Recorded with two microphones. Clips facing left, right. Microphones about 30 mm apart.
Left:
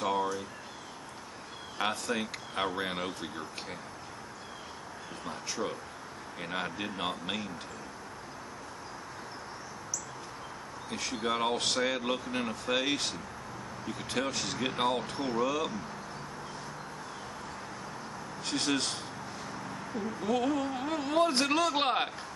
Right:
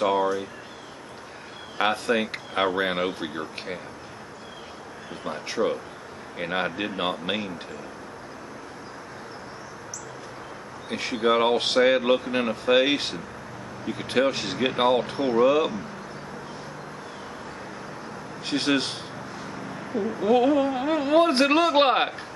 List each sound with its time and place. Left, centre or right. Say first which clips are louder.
0.0 s speech: right 8 dB; right
1.8 s speech: right 9 dB; right
5.2 s speech: right 10 dB; right
10.9 s speech: right 10 dB; right
18.4 s speech: right 7 dB; right
19.4 s a sound: right 5 dB; centre